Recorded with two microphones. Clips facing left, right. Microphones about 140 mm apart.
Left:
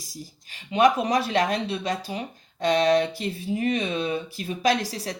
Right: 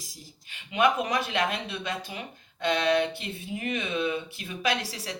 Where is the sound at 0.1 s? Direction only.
35° left (ahead or behind).